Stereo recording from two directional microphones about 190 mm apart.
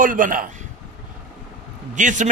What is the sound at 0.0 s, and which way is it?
Speech, 45° right (ahead or behind).